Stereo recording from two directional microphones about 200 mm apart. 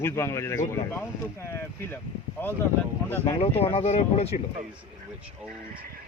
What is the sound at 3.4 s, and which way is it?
Speech, 30° left (ahead or behind).